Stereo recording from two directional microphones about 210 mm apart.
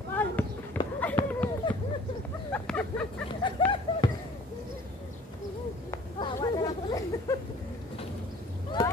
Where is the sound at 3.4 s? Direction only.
20° left (ahead or behind).